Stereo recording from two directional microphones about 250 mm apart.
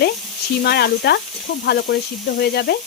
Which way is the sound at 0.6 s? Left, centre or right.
Left.